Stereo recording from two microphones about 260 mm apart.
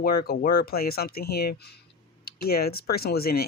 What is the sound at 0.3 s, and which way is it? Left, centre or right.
Speech, left.